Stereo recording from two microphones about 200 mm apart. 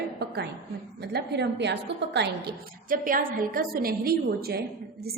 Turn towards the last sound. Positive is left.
turn(degrees=-50)  # may be behind; listen again after turning